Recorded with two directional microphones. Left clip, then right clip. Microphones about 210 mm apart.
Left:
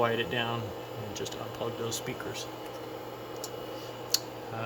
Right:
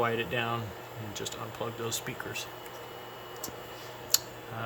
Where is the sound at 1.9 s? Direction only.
Centre (ahead or behind).